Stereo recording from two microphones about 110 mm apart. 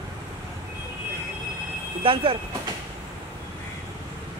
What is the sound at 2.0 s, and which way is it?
Speech, 55° right (ahead or behind).